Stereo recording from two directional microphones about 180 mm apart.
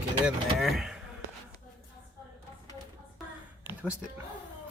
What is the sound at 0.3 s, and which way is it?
Speech, centre (ahead or behind).